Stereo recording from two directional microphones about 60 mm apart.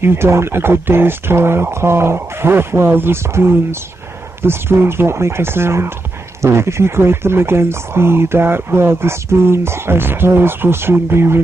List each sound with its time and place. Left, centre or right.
0.0 s speech: right